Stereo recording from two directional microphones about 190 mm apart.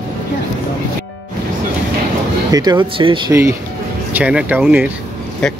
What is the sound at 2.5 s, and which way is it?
Speech, 20° right (ahead or behind).